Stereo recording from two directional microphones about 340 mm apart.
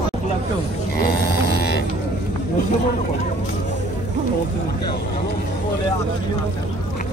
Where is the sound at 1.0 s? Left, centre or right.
Left.